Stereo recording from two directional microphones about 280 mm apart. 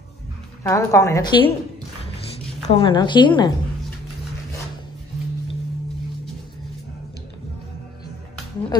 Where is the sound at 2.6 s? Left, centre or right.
Centre.